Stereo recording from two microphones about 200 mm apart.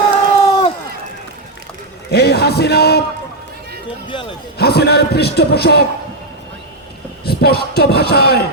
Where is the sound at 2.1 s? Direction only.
55° left (ahead or behind).